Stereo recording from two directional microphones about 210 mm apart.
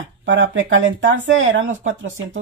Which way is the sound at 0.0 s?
65° right (ahead or behind).